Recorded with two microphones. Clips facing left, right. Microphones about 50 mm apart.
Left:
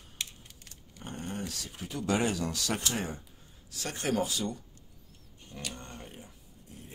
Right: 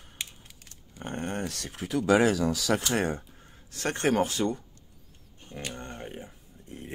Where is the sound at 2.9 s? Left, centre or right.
Right.